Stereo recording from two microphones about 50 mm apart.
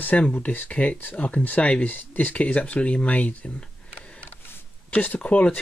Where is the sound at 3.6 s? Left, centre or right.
Left.